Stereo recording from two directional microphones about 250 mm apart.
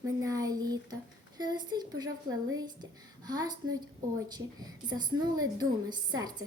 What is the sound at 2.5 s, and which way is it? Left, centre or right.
A woman's voice, centre.